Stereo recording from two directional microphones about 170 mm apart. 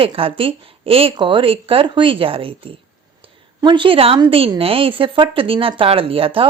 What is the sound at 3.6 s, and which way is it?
Speech, 30° right (ahead or behind).